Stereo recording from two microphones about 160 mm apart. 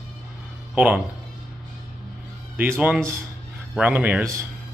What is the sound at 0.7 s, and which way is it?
Speech, 10° right (ahead or behind).